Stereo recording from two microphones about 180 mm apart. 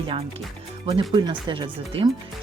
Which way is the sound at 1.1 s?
25° right (ahead or behind).